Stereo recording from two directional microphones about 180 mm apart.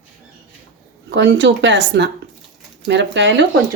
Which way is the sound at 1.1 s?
80° right.